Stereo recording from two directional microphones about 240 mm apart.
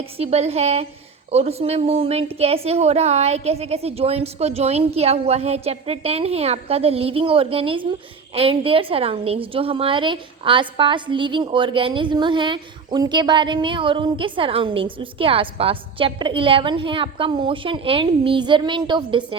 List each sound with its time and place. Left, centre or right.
0.2 s a woman's voice: right